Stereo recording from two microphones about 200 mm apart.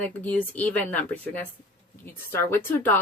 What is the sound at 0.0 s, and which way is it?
Speech, 10° left (ahead or behind).